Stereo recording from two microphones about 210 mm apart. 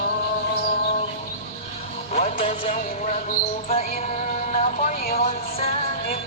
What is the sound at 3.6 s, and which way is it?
Music, 30° left (ahead or behind).